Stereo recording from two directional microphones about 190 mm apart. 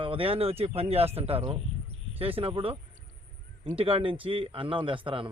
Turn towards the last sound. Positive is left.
turn(degrees=-25)  # may be behind; listen again after turning